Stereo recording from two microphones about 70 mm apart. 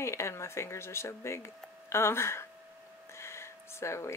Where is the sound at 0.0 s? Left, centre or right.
Left.